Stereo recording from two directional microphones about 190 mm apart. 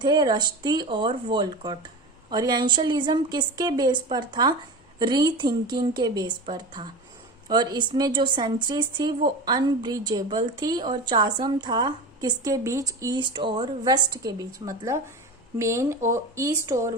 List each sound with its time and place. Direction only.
0.0 s a woman's voice: 20° right (ahead or behind)